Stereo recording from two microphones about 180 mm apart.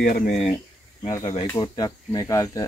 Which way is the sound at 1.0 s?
25° left (ahead or behind).